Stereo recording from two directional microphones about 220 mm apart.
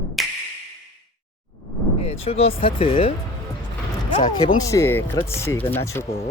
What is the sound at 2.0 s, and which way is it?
Speech, 30° left (ahead or behind).